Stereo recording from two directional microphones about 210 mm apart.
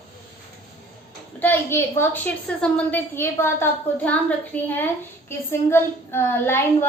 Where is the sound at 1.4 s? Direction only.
10° left (ahead or behind).